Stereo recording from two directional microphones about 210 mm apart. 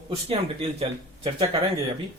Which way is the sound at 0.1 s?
30° right (ahead or behind).